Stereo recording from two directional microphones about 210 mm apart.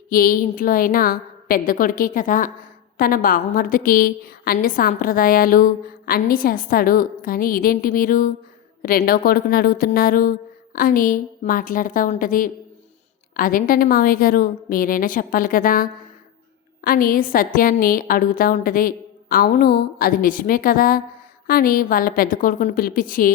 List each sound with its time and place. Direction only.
0.1 s a woman's voice: 45° left (ahead or behind)